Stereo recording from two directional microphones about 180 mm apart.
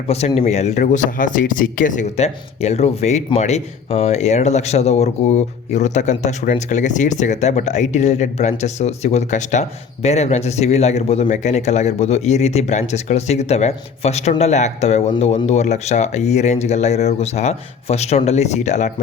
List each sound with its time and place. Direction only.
0.1 s speech: 35° left (ahead or behind)